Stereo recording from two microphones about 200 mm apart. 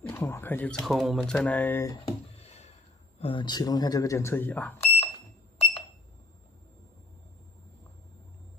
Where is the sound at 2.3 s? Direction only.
30° left (ahead or behind).